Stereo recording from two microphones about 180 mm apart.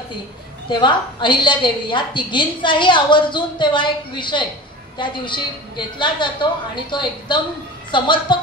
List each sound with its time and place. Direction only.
0.7 s a woman's voice: 25° left (ahead or behind)